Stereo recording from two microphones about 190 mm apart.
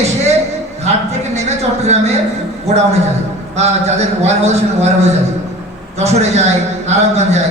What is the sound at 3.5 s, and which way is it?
A woman's voice, 35° right (ahead or behind).